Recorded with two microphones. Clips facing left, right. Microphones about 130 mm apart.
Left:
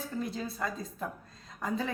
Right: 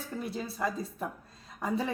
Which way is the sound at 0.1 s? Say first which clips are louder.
Right 1 dB; 15° right (ahead or behind).